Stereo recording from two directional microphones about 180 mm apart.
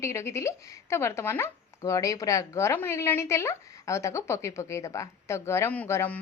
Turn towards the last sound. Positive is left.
turn(degrees=10)  # may be behind; listen again after turning